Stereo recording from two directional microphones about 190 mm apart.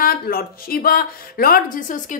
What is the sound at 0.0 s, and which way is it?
Speech, 50° left (ahead or behind).